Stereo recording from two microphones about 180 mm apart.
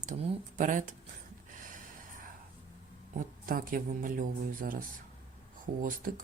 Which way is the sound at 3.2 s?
50° right (ahead or behind).